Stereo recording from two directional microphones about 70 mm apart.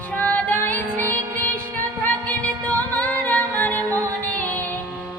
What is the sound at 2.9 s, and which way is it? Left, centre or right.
Music, left.